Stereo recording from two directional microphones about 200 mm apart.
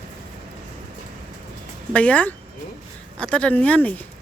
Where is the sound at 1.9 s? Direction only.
5° left (ahead or behind).